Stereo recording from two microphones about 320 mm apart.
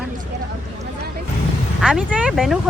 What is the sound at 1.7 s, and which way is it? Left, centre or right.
Speech, centre.